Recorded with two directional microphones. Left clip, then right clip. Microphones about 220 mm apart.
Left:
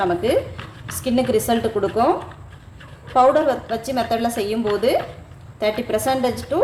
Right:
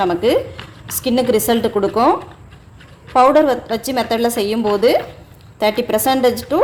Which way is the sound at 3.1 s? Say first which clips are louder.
Right 4 dB; 50° right (ahead or behind).